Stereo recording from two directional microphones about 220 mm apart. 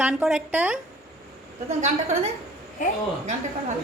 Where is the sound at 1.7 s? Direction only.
30° right (ahead or behind).